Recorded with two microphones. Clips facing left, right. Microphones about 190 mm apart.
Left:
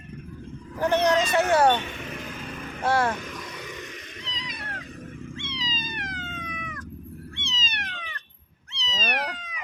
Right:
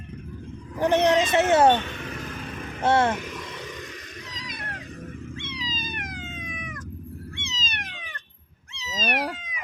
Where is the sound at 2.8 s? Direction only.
25° right (ahead or behind).